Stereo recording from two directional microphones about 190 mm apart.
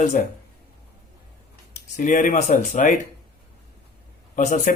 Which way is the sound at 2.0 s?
45° left (ahead or behind).